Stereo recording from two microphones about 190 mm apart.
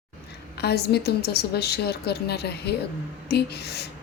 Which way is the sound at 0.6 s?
60° left (ahead or behind).